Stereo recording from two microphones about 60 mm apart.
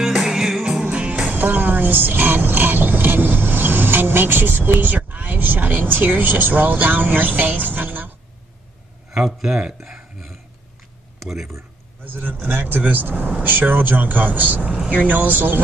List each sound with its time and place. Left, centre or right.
0.0 s music: centre
1.3 s speech: right
9.1 s speech: centre
11.1 s a sound: centre
12.0 s speech: right